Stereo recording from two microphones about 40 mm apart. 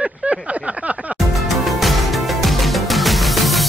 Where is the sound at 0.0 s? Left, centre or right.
Right.